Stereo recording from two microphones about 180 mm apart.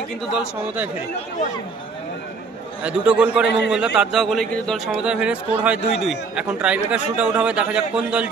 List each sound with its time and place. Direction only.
0.3 s a man's voice: 5° right (ahead or behind)
2.8 s a man's voice: 5° right (ahead or behind)
3.4 s a man's voice: 75° left (ahead or behind)
3.7 s a man's voice: 5° right (ahead or behind)